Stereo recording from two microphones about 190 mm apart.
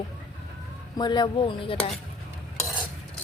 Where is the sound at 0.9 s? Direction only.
25° left (ahead or behind).